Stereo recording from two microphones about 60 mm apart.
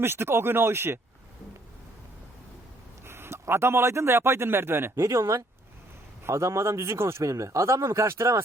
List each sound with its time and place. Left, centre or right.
0.0 s speech: right
3.1 s a man's voice: right